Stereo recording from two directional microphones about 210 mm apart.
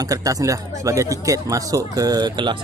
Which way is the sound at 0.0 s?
15° right (ahead or behind).